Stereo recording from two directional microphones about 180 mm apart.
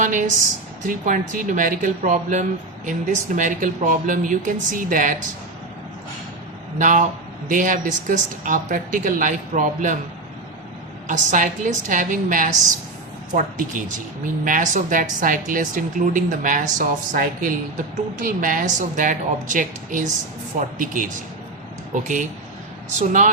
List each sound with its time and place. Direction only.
0.0 s a sound: 45° right (ahead or behind)
0.9 s speech: 50° right (ahead or behind)
6.7 s speech: 45° right (ahead or behind)
11.1 s speech: 45° right (ahead or behind)